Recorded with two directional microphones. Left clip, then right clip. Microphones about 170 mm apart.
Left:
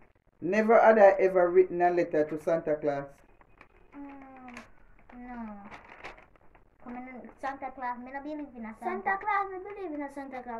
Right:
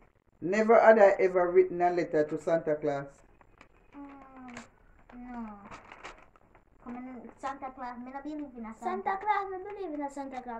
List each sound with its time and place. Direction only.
0.4 s a man's voice: 5° left (ahead or behind)
5.2 s cat: 25° left (ahead or behind)
7.1 s a woman's voice: 20° left (ahead or behind)
8.8 s a child's voice: 10° right (ahead or behind)